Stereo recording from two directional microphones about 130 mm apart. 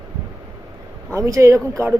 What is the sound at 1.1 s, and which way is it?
Speech, 25° right (ahead or behind).